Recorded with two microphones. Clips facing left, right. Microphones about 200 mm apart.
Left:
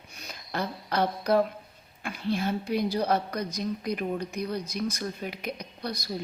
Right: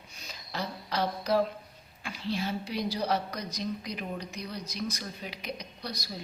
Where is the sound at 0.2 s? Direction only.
55° left (ahead or behind).